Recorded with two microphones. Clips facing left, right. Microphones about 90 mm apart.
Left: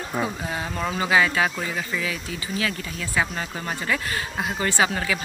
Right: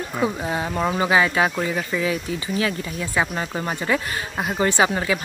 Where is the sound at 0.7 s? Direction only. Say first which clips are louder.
Right 2 dB; 20° right (ahead or behind).